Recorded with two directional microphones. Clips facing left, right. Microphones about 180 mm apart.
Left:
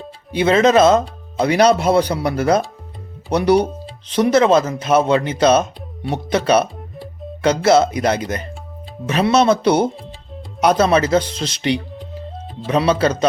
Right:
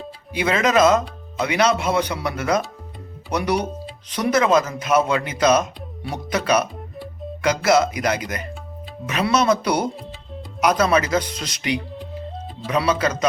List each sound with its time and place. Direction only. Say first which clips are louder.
0.3 s speech: left 5 dB; 30° left (ahead or behind)